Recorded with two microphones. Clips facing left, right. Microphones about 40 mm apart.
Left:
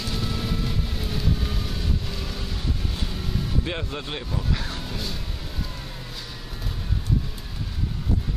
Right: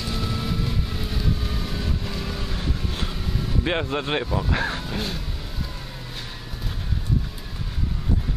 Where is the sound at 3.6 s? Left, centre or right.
Right.